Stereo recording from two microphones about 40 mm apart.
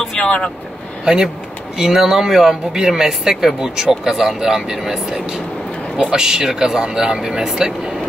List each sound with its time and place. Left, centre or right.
0.2 s speech: left
1.0 s speech: centre